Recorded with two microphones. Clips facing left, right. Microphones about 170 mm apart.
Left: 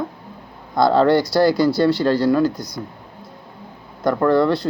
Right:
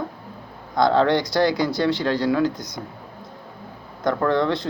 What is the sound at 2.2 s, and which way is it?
Speech, centre (ahead or behind).